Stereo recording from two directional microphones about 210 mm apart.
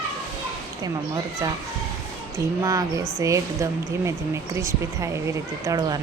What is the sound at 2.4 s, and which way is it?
Speech, 15° right (ahead or behind).